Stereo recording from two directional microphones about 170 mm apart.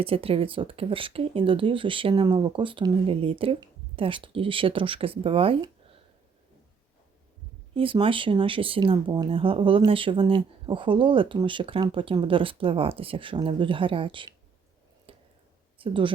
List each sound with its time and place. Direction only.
0.0 s speech: 35° right (ahead or behind)
7.8 s speech: 30° right (ahead or behind)
15.1 s a sound: 35° right (ahead or behind)
15.8 s speech: 30° right (ahead or behind)